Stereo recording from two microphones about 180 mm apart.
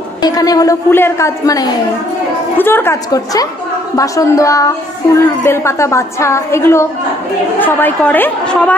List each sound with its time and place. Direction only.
0.2 s a woman's voice: 20° left (ahead or behind)